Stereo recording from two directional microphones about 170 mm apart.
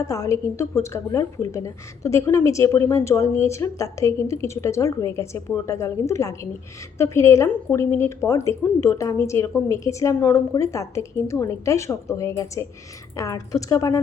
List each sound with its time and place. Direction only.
0.0 s a woman's voice: 20° left (ahead or behind)